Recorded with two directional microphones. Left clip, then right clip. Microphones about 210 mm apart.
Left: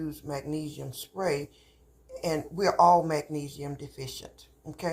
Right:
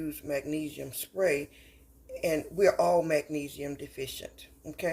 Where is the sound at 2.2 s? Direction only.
65° right (ahead or behind).